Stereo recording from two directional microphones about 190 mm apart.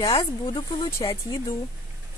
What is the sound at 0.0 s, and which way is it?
Speech, 20° left (ahead or behind).